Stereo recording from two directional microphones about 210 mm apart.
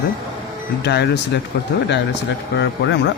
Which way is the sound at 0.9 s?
55° left (ahead or behind).